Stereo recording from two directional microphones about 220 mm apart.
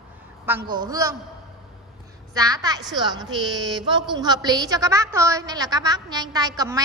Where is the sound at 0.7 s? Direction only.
20° right (ahead or behind).